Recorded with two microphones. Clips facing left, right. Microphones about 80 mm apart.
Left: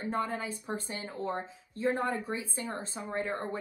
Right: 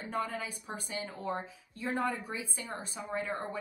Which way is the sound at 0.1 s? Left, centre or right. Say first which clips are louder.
Left 1 dB; left.